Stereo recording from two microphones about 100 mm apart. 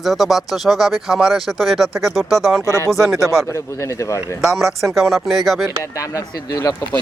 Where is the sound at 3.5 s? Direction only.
30° left (ahead or behind).